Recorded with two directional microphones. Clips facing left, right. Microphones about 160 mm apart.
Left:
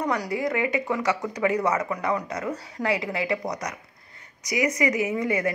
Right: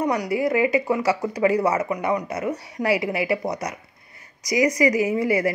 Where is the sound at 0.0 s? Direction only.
20° right (ahead or behind).